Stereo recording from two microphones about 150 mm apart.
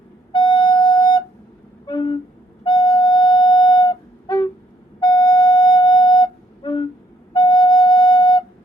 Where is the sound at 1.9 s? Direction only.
30° left (ahead or behind).